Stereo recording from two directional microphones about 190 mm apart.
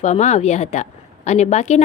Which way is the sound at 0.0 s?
35° left (ahead or behind).